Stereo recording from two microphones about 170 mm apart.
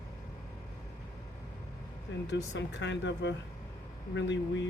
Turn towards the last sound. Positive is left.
turn(degrees=90)